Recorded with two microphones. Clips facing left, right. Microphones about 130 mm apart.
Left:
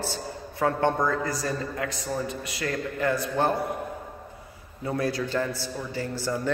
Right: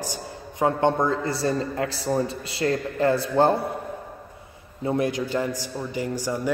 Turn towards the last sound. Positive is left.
turn(degrees=-15)  # may be behind; listen again after turning